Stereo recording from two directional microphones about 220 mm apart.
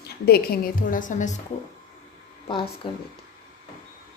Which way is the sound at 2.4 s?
25° left (ahead or behind).